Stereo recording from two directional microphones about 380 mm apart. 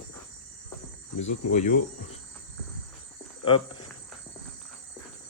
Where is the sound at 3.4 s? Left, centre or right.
Centre.